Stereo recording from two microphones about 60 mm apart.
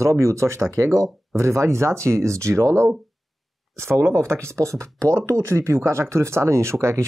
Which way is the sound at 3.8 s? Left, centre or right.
Right.